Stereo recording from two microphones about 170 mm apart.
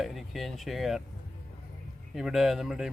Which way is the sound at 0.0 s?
Centre (ahead or behind).